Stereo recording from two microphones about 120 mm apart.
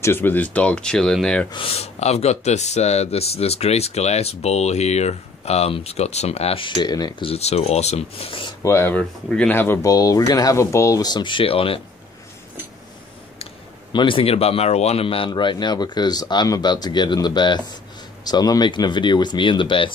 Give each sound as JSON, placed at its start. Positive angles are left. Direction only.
{"t": 0.0, "sound": "speech", "side_deg": 20}
{"t": 1.5, "sound": "speech", "side_deg": 50}
{"t": 7.2, "sound": "speech", "side_deg": 60}
{"t": 8.6, "sound": "speech", "side_deg": 20}
{"t": 8.9, "sound": "speech", "side_deg": 10}
{"t": 9.8, "sound": "speech", "side_deg": 30}
{"t": 13.9, "sound": "speech", "side_deg": 45}